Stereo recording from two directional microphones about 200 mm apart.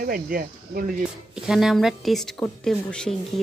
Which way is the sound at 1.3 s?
Centre (ahead or behind).